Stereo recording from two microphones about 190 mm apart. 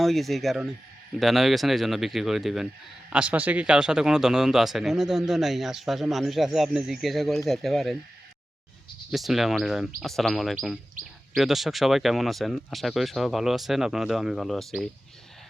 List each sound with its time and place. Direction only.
0.0 s a man's voice: centre (ahead or behind)
9.1 s a man's voice: centre (ahead or behind)